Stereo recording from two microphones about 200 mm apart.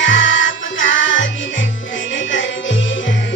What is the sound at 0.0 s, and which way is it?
Music, 70° left (ahead or behind).